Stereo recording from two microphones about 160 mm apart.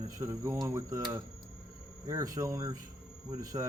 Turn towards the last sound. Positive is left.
turn(degrees=-20)  # may be behind; listen again after turning